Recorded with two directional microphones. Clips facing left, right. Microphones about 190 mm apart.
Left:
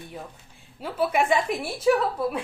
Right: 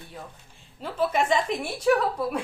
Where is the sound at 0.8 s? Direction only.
10° left (ahead or behind).